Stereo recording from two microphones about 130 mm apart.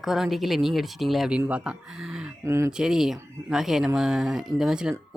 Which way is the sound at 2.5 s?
20° right (ahead or behind).